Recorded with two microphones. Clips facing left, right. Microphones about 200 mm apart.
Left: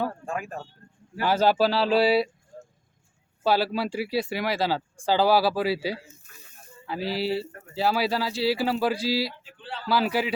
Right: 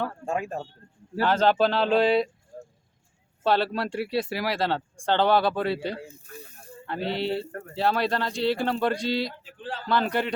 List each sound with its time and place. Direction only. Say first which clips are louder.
0.3 s speech: right 3 dB; 25° right (ahead or behind)
1.2 s speech: even; 10° left (ahead or behind)
3.4 s speech: even; 5° left (ahead or behind)
9.4 s speech: right 3 dB; 45° right (ahead or behind)
9.8 s speech: left 1 dB; 5° left (ahead or behind)